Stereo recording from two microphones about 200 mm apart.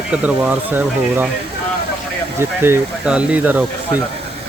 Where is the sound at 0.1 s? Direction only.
5° right (ahead or behind).